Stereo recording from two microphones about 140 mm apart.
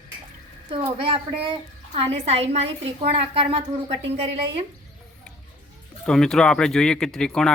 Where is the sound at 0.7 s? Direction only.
40° right (ahead or behind).